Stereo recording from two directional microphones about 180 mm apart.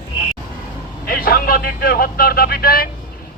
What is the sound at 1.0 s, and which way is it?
A man's voice, 55° left (ahead or behind).